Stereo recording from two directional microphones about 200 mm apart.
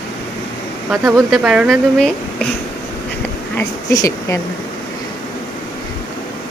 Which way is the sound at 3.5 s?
15° left (ahead or behind).